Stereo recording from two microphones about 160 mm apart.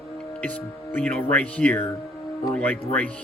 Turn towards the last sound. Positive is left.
turn(degrees=10)  # may be behind; listen again after turning